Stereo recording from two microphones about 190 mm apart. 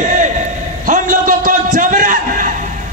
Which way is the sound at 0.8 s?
45° right (ahead or behind).